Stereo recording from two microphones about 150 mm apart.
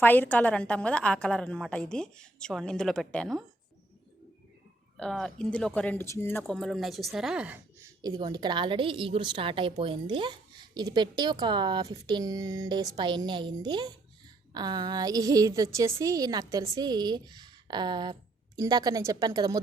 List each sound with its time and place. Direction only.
0.0 s a woman's voice: 10° left (ahead or behind)
4.9 s speech: 5° left (ahead or behind)
6.5 s a woman's voice: centre (ahead or behind)
8.0 s a woman's voice: 25° right (ahead or behind)